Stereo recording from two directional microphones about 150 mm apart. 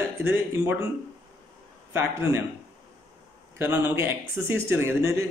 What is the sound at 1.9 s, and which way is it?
Speech, 15° right (ahead or behind).